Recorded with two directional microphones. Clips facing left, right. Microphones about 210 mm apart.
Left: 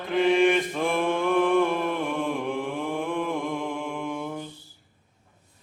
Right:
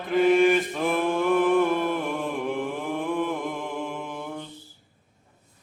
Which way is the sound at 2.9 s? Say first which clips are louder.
Right 2 dB; centre (ahead or behind).